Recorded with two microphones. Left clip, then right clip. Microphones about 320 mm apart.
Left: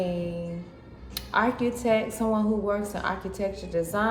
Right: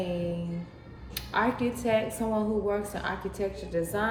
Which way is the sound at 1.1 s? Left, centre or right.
Centre.